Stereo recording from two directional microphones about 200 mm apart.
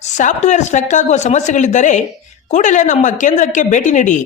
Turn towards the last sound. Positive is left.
turn(degrees=40)  # may be behind; listen again after turning